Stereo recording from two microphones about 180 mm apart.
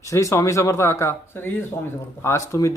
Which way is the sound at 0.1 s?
15° left (ahead or behind).